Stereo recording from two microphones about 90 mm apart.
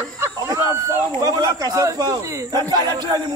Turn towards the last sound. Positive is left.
turn(degrees=-50)  # may be behind; listen again after turning